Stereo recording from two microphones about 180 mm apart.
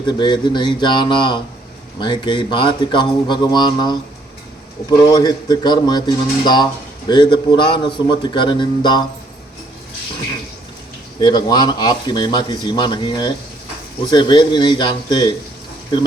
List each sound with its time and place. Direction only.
0.0 s speech: 25° left (ahead or behind)
11.2 s speech: 25° left (ahead or behind)